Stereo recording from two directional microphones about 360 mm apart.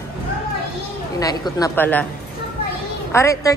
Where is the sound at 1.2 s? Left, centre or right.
Centre.